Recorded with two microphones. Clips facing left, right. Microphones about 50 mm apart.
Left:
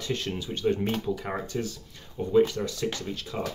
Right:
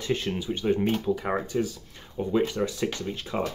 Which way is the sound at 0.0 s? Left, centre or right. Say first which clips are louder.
Right 3 dB; centre.